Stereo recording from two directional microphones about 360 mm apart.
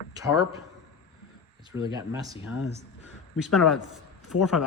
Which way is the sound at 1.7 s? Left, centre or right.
Centre.